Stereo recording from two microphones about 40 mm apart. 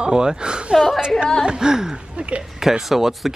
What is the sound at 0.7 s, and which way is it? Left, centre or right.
Speech, centre.